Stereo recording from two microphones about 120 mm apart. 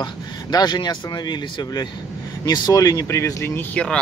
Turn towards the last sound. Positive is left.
turn(degrees=25)  # may be behind; listen again after turning